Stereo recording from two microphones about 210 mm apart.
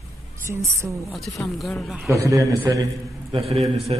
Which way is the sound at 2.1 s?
15° right (ahead or behind).